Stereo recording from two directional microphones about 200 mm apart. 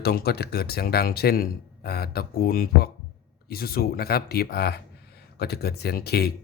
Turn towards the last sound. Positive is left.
turn(degrees=50)  # may be behind; listen again after turning